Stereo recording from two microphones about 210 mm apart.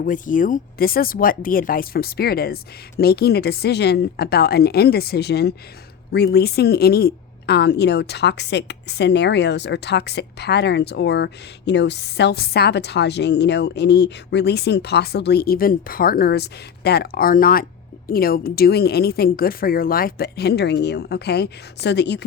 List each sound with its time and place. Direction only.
0.0 s a woman's voice: 40° left (ahead or behind); by 22.3 s 55° left (ahead or behind)